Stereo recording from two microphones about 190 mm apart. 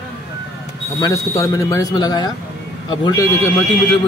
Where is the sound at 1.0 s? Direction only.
15° left (ahead or behind).